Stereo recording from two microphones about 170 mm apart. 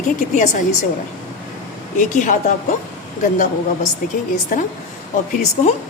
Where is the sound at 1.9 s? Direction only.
50° left (ahead or behind).